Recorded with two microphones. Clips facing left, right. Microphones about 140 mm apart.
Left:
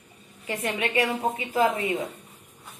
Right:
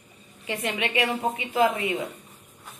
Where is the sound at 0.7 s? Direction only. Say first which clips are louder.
Left 1 dB; 40° left (ahead or behind).